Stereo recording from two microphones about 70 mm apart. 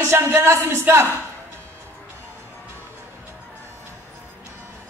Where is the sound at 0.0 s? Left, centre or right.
Right.